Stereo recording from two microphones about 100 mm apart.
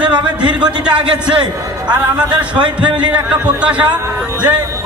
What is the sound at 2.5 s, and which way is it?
Speech, 50° right (ahead or behind).